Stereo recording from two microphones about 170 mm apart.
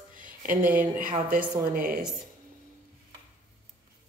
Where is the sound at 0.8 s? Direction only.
50° right (ahead or behind).